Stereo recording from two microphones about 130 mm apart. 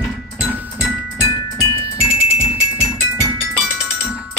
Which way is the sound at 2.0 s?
5° right (ahead or behind).